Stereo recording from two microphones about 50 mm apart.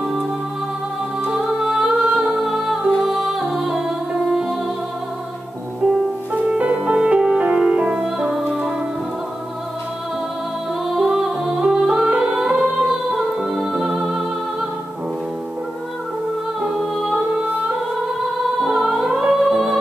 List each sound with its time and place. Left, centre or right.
1.3 s music: centre
6.3 s music: right
8.0 s music: centre
11.0 s music: centre
16.6 s music: centre
18.6 s music: centre